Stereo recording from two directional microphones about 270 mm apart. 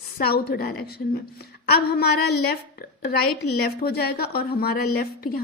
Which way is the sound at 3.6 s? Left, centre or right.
Left.